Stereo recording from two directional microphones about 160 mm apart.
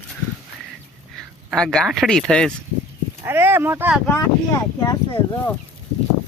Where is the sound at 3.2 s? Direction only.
15° right (ahead or behind).